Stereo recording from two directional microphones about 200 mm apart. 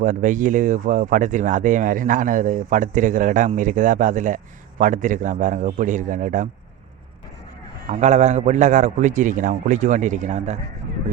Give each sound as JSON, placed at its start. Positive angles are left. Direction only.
{"t": 0.0, "sound": "speech", "side_deg": -40}
{"t": 7.9, "sound": "speech", "side_deg": -35}